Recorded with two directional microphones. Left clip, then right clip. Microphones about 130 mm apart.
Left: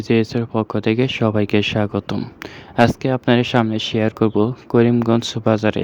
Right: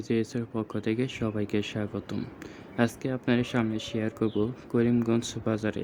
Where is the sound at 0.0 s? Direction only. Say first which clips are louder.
Left 11 dB; 50° left (ahead or behind).